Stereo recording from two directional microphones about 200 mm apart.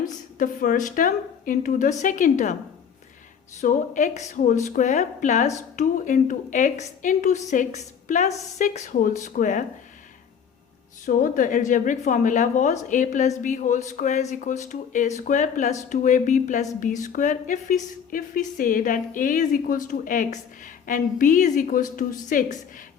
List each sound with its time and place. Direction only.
0.0 s speech: 40° left (ahead or behind)
3.6 s speech: 40° left (ahead or behind)
11.0 s speech: 40° left (ahead or behind)